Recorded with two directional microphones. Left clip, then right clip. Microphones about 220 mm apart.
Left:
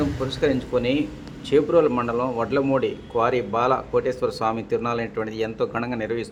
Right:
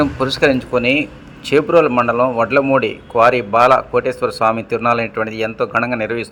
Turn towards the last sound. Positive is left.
turn(degrees=-10)  # may be behind; listen again after turning